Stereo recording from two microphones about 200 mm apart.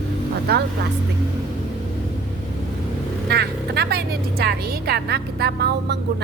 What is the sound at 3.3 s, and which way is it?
A woman's voice, 55° right (ahead or behind).